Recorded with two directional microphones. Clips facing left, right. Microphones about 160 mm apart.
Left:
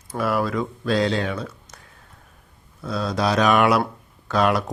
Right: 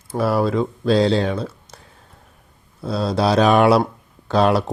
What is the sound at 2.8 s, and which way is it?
Speech, 30° right (ahead or behind).